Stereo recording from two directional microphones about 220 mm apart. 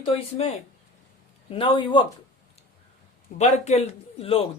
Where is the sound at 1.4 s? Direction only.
25° left (ahead or behind).